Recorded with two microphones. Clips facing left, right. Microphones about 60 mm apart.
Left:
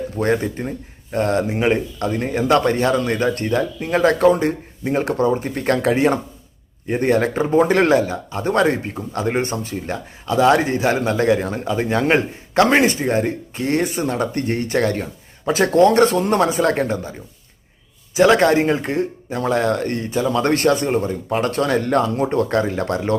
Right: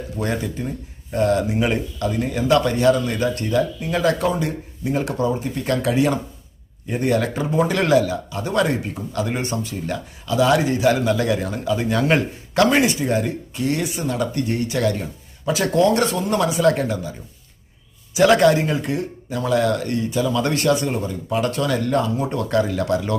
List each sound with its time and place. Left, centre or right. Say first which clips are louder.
0.2 s speech: left 5 dB; left
18.1 s speech: left 1 dB; left
22.3 s speech: left 2 dB; left